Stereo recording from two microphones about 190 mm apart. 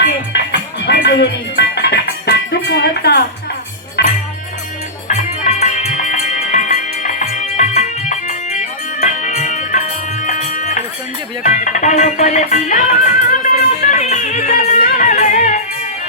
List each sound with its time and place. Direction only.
0.0 s music: 65° left (ahead or behind)
5.0 s music: 40° left (ahead or behind)